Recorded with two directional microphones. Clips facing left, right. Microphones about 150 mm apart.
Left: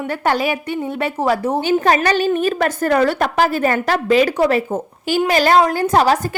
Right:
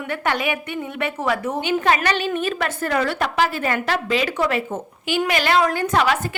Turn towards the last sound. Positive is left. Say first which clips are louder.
# left 5 dB
turn(degrees=35)  # may be behind; listen again after turning